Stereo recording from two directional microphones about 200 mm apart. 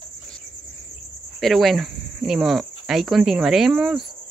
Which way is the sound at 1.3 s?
Centre (ahead or behind).